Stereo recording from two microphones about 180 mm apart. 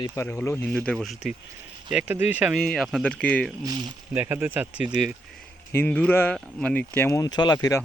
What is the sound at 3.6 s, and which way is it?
Speech, 25° right (ahead or behind).